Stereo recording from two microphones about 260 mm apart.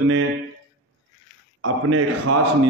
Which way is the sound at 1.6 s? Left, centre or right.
Right.